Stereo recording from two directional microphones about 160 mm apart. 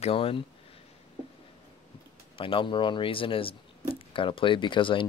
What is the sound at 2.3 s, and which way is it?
Speech, 35° left (ahead or behind).